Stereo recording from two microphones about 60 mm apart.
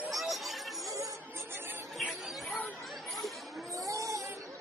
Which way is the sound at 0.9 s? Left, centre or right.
Right.